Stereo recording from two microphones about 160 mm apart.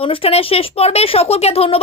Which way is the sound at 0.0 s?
35° left (ahead or behind).